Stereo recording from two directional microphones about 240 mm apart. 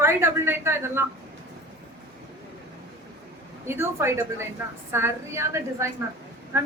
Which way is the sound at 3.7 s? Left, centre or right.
Centre.